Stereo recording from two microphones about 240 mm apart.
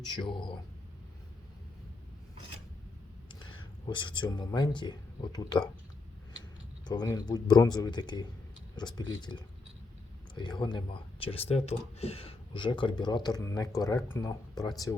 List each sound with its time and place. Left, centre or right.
0.1 s speech: centre
3.4 s speech: centre
6.8 s speech: centre